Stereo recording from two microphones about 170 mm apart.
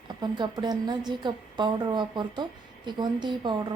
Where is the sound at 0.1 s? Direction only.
25° right (ahead or behind).